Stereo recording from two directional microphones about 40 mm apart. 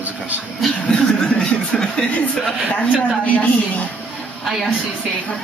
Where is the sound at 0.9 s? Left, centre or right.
Left.